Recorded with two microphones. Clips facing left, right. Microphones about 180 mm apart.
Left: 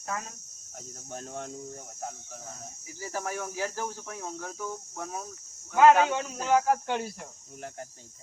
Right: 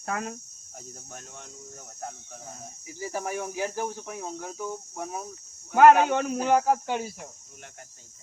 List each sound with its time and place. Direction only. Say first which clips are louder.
0.0 s speech: right 4 dB; 65° right (ahead or behind)
1.3 s speech: left 9 dB; 50° left (ahead or behind)
2.8 s speech: right 2 dB; 15° right (ahead or behind)
5.7 s speech: right 3 dB; 55° right (ahead or behind)
6.8 s speech: right 1 dB; 5° right (ahead or behind)